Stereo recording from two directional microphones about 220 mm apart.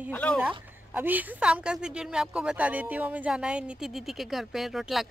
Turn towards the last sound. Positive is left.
turn(degrees=0)  # may be behind; listen again after turning